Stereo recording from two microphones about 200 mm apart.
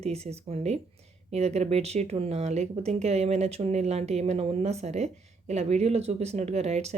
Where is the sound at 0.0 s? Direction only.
30° right (ahead or behind).